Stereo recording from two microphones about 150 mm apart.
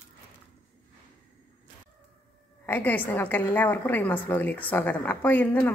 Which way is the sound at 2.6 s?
10° left (ahead or behind).